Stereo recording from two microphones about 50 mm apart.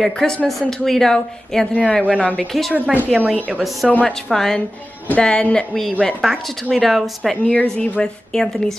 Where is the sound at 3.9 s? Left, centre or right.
Left.